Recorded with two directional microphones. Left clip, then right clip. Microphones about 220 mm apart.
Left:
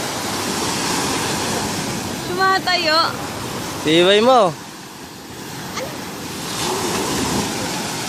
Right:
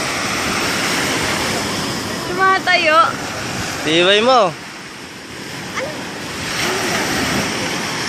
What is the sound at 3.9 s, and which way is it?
Speech, 30° left (ahead or behind).